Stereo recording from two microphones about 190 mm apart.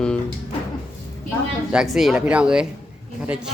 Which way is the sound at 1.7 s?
Centre (ahead or behind).